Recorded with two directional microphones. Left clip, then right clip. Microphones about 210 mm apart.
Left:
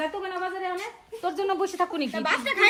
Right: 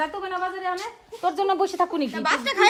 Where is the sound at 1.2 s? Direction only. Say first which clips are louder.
Right 4 dB; 30° right (ahead or behind).